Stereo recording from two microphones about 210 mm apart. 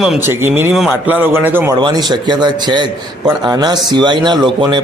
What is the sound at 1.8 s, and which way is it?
A man's voice, 20° right (ahead or behind).